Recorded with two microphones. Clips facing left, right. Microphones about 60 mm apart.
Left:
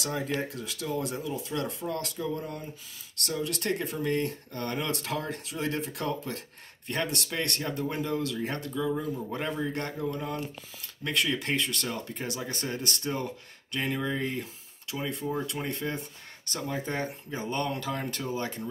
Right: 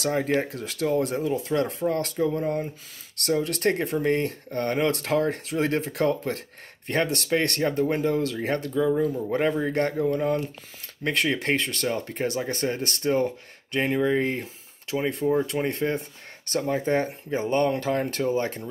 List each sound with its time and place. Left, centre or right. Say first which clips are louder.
0.0 s speech: right 7 dB; right
8.7 s speech: right 8 dB; right
15.3 s speech: right 8 dB; right